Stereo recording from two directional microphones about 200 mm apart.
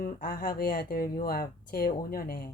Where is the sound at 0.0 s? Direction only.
45° left (ahead or behind).